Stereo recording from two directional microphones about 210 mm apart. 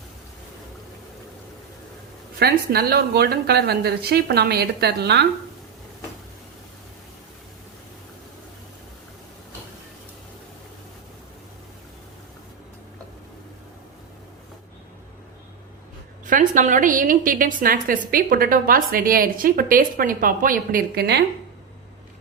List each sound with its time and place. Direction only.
2.4 s a woman's voice: 50° right (ahead or behind)
16.2 s a woman's voice: 40° right (ahead or behind)